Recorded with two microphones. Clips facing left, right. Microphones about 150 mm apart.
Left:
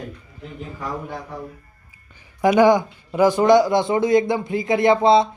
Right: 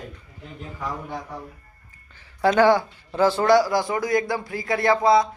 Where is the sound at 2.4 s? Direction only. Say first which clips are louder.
Left 3 dB; 15° left (ahead or behind).